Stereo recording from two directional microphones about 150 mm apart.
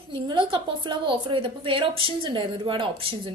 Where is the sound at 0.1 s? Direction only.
30° right (ahead or behind).